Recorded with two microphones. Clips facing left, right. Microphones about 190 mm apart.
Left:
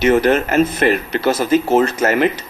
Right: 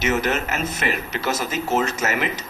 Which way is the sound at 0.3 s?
55° left (ahead or behind).